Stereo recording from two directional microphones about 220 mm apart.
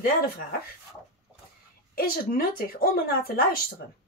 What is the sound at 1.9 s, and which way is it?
Speech, 40° left (ahead or behind).